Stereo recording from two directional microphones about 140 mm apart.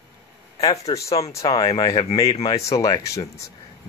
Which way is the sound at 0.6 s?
25° left (ahead or behind).